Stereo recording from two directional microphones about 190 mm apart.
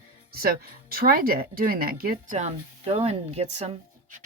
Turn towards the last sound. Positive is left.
turn(degrees=-35)  # may be behind; listen again after turning